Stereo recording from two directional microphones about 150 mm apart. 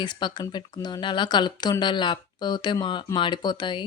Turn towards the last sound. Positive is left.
turn(degrees=30)  # may be behind; listen again after turning